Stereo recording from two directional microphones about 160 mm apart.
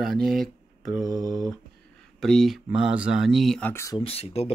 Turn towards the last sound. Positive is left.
turn(degrees=40)  # may be behind; listen again after turning